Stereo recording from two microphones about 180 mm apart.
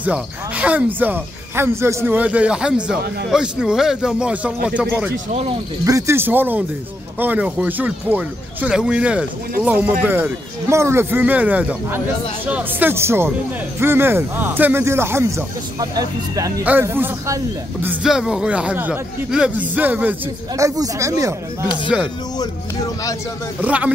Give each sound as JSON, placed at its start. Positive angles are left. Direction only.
{"t": 0.0, "sound": "speech", "side_deg": -5}
{"t": 17.8, "sound": "speech", "side_deg": -5}
{"t": 21.8, "sound": "speech", "side_deg": -5}
{"t": 23.6, "sound": "speech", "side_deg": -10}